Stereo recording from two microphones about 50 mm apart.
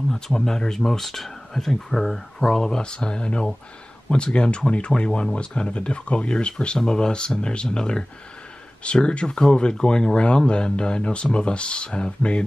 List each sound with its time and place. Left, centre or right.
0.1 s speech: centre